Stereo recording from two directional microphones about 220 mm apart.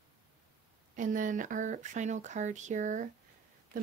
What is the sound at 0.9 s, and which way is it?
Speech, 35° right (ahead or behind).